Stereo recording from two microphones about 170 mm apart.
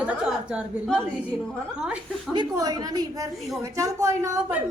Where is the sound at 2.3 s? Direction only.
25° right (ahead or behind).